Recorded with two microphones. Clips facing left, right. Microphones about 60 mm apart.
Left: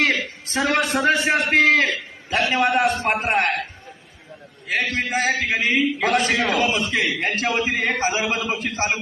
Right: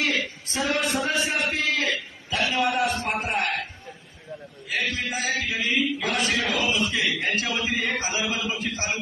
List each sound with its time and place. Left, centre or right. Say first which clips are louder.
0.0 s a man's voice: left 5 dB; left
2.3 s a sound: left 5 dB; left
3.1 s a man's voice: left 6 dB; left
4.6 s a man's voice: left 5 dB; left